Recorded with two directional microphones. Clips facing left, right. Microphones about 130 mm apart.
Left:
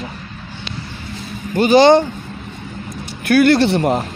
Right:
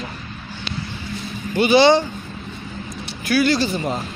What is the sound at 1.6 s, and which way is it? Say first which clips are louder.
Speech: left 4 dB; 45° left (ahead or behind).